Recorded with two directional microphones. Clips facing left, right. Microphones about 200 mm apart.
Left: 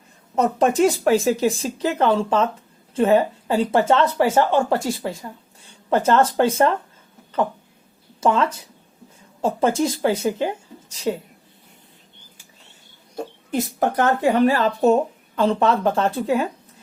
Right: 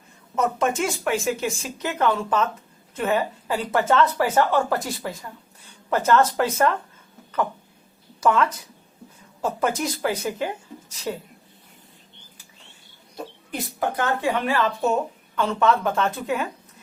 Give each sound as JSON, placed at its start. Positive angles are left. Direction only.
{"t": 0.3, "sound": "a woman's voice", "side_deg": 35}
{"t": 8.2, "sound": "a woman's voice", "side_deg": 25}
{"t": 13.5, "sound": "speech", "side_deg": 45}